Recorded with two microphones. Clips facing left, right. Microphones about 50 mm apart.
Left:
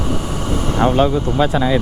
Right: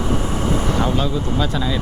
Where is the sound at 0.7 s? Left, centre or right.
Left.